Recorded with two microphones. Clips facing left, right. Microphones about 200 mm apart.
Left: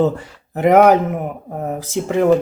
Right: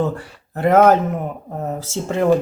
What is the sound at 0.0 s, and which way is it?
Speech, 20° left (ahead or behind).